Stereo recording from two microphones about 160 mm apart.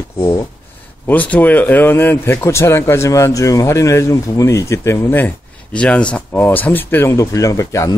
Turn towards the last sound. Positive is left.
turn(degrees=20)  # may be behind; listen again after turning